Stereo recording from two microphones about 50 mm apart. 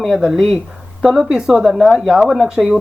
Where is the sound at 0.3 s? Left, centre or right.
Centre.